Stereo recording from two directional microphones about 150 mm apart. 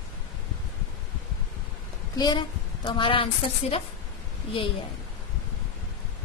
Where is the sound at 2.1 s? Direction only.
25° left (ahead or behind).